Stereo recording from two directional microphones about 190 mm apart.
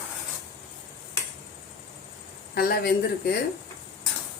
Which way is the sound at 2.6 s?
50° left (ahead or behind).